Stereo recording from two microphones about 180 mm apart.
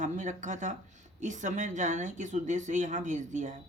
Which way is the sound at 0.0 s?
45° right (ahead or behind).